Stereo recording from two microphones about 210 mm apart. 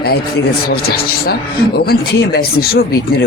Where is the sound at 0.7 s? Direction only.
50° left (ahead or behind).